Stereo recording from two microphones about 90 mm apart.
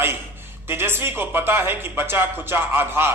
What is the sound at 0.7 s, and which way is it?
Speech, 25° right (ahead or behind).